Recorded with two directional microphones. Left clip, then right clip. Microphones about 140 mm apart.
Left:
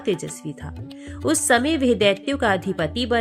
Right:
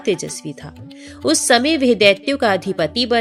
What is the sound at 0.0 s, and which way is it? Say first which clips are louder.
A woman's voice: right 4 dB; 25° right (ahead or behind).